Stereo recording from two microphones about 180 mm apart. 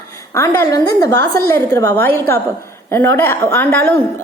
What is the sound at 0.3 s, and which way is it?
A woman's voice, 20° left (ahead or behind).